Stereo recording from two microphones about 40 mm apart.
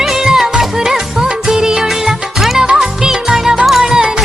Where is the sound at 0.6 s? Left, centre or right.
Centre.